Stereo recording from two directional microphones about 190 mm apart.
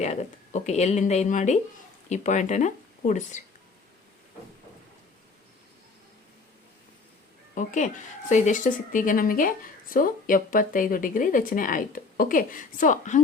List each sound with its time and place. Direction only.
0.0 s speech: 35° left (ahead or behind)
7.5 s speech: 40° left (ahead or behind)